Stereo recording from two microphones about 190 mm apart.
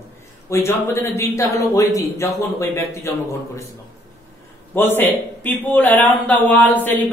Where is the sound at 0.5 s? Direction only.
15° left (ahead or behind).